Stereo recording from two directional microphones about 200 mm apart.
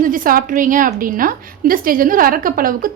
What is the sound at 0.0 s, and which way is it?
A woman's voice, 45° right (ahead or behind).